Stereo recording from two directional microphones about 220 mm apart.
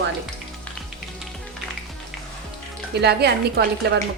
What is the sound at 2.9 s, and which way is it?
A woman's voice, 50° right (ahead or behind).